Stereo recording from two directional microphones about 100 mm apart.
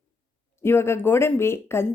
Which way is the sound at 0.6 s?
25° left (ahead or behind).